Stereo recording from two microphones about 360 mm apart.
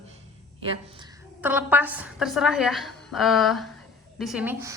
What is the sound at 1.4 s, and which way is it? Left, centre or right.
A woman's voice, centre.